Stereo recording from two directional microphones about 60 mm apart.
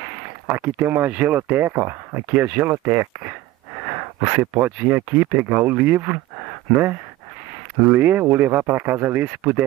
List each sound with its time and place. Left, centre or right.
0.5 s speech: right